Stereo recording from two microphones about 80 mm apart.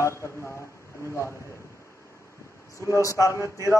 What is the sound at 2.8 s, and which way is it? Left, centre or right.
Speech, left.